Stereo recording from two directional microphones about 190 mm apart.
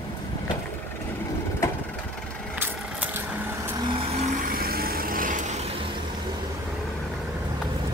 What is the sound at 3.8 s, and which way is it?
Vehicle, 25° right (ahead or behind).